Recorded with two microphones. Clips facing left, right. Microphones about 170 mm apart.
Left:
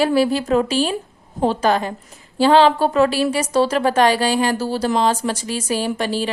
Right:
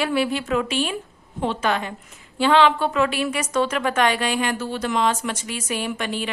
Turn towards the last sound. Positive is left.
turn(degrees=35)  # may be behind; listen again after turning